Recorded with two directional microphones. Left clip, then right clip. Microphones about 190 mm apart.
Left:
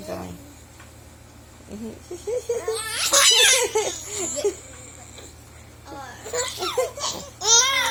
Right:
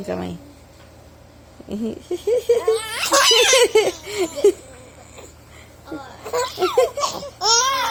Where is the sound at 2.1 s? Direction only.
55° right (ahead or behind).